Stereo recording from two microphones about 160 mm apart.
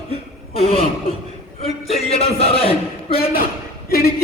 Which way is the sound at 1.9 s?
40° left (ahead or behind).